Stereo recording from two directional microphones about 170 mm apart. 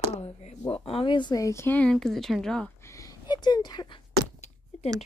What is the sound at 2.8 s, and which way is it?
Speech, 20° left (ahead or behind).